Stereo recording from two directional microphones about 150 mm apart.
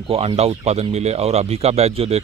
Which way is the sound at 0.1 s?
40° right (ahead or behind).